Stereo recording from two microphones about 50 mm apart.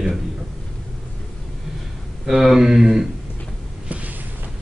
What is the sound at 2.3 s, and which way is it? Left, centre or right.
Speech, centre.